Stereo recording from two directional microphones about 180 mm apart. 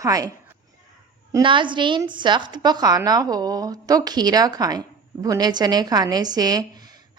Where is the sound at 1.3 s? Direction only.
25° right (ahead or behind).